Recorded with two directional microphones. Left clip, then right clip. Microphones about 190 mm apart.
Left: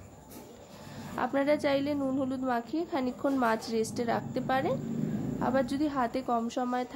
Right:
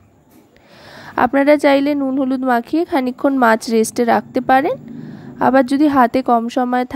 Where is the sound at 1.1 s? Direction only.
50° right (ahead or behind).